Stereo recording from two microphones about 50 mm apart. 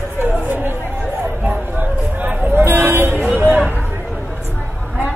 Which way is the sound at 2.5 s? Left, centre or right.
Right.